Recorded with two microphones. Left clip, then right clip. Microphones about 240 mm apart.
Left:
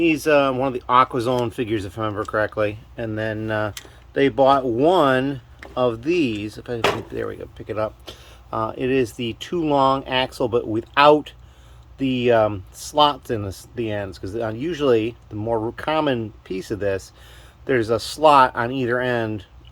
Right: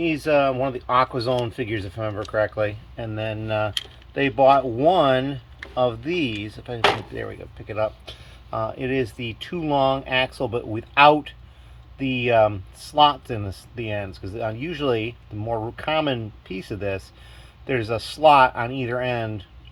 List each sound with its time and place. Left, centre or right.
0.0 s speech: centre